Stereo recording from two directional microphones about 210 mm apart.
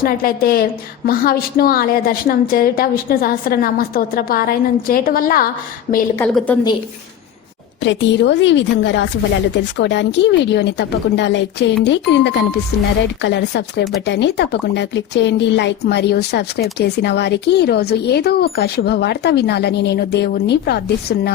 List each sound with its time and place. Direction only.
0.0 s a woman's voice: 45° left (ahead or behind)
6.1 s a woman's voice: 5° left (ahead or behind)
7.8 s a woman's voice: 60° left (ahead or behind)